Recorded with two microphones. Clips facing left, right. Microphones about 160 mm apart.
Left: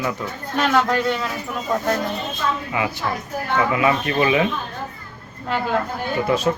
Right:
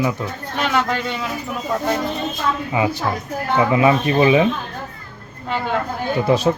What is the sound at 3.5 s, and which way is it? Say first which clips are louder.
Speech: right 4 dB; 25° right (ahead or behind).